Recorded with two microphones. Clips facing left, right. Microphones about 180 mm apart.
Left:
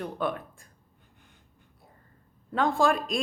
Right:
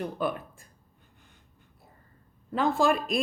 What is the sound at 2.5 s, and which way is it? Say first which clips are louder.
Speech: even; 5° right (ahead or behind).